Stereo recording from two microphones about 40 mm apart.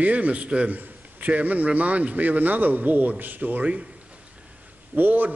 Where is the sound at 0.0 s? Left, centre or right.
Right.